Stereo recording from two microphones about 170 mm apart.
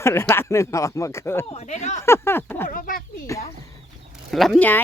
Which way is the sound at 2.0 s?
15° left (ahead or behind).